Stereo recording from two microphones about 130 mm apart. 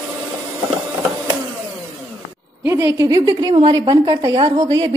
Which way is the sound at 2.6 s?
20° right (ahead or behind).